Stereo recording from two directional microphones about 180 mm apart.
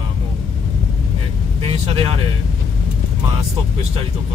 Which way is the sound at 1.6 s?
30° right (ahead or behind).